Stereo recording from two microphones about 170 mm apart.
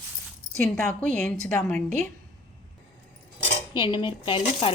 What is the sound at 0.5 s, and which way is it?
A woman's voice, 5° left (ahead or behind).